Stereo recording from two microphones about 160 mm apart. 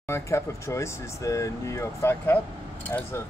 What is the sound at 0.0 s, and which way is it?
Speech, 15° left (ahead or behind).